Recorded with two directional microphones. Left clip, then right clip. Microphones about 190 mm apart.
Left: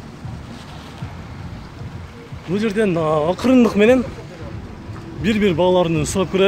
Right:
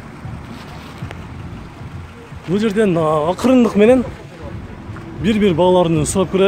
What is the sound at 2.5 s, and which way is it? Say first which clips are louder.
Speech: right 3 dB; 15° right (ahead or behind).